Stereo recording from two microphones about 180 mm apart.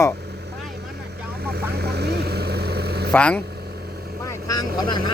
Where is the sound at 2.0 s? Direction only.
65° right (ahead or behind).